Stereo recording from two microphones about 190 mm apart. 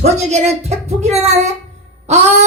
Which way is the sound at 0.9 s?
35° right (ahead or behind).